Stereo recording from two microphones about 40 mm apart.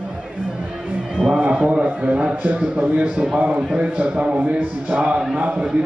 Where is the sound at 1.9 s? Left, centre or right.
Right.